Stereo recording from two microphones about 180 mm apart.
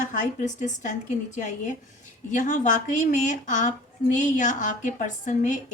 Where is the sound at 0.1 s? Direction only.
45° left (ahead or behind).